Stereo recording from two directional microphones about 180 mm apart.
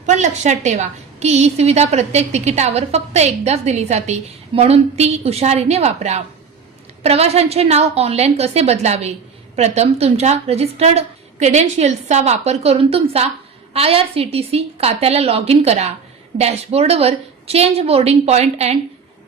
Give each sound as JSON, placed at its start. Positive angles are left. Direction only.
{"t": 0.0, "sound": "a woman's voice", "side_deg": -40}